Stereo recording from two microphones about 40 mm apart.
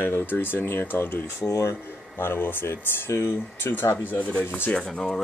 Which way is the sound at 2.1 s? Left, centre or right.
Left.